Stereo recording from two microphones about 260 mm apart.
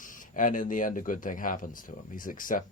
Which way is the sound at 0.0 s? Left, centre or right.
Left.